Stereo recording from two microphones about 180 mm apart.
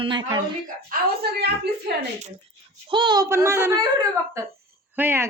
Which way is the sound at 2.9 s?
25° right (ahead or behind).